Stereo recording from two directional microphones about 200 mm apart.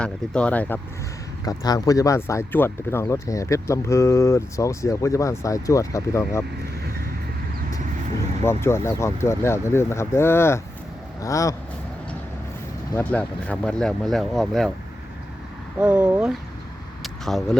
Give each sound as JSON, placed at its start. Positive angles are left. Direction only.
{"t": 0.0, "sound": "speech", "side_deg": 5}
{"t": 1.5, "sound": "speech", "side_deg": 20}
{"t": 8.4, "sound": "speech", "side_deg": 15}
{"t": 12.9, "sound": "speech", "side_deg": 10}
{"t": 15.8, "sound": "speech", "side_deg": -5}
{"t": 17.0, "sound": "a sound", "side_deg": 0}